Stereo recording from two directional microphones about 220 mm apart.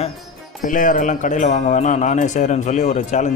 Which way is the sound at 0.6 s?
35° left (ahead or behind).